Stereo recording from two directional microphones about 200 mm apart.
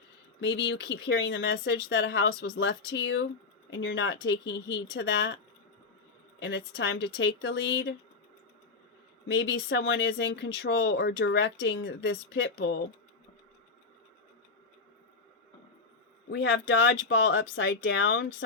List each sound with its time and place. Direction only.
0.3 s speech: 65° left (ahead or behind)
6.4 s speech: 65° left (ahead or behind)
9.2 s speech: 65° left (ahead or behind)
16.4 s speech: 70° left (ahead or behind)